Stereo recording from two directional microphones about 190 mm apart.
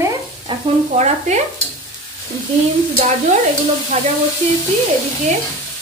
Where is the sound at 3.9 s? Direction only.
35° right (ahead or behind).